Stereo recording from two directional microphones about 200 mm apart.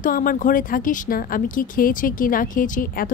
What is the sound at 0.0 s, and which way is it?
A woman's voice, 45° left (ahead or behind).